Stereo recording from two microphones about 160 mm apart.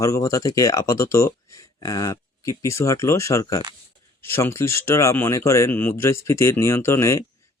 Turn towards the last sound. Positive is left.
turn(degrees=20)  # may be behind; listen again after turning